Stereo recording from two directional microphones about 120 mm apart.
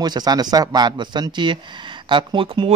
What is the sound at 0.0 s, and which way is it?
Speech, 35° right (ahead or behind).